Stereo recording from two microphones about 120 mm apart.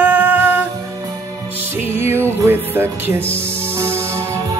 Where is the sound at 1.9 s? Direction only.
20° right (ahead or behind).